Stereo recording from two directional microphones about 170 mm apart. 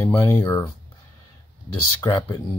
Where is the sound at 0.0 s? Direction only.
20° left (ahead or behind).